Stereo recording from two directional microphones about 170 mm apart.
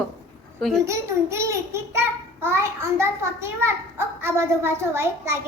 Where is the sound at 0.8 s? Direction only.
15° right (ahead or behind).